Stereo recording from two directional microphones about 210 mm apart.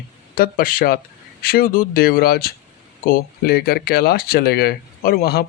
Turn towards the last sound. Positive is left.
turn(degrees=50)  # may be behind; listen again after turning